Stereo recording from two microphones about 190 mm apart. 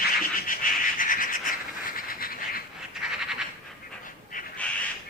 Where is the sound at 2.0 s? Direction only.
50° left (ahead or behind).